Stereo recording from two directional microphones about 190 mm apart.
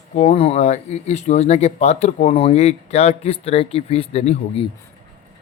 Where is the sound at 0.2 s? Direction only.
30° left (ahead or behind).